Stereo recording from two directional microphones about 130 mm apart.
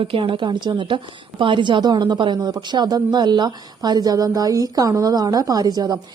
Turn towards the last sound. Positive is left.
turn(degrees=-30)  # may be behind; listen again after turning